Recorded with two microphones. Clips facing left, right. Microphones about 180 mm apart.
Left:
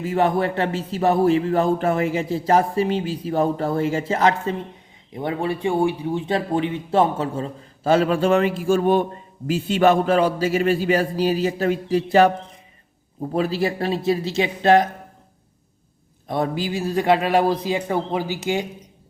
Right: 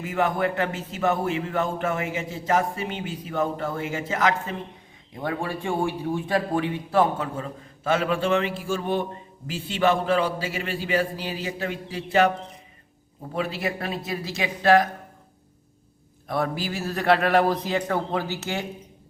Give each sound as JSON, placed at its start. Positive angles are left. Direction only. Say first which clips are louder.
{"t": 0.0, "sound": "a man's voice", "louder": "left 4 dB", "side_deg": 30}
{"t": 13.3, "sound": "a man's voice", "louder": "left 6 dB", "side_deg": 35}
{"t": 16.2, "sound": "a man's voice", "louder": "left 3 dB", "side_deg": 20}